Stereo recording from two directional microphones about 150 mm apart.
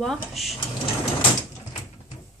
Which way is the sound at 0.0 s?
Centre (ahead or behind).